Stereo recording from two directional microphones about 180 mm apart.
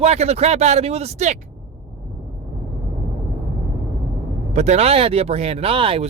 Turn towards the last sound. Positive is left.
turn(degrees=-30)  # may be behind; listen again after turning